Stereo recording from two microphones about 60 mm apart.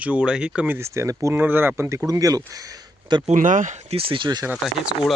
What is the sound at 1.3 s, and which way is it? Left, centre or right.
Speech, right.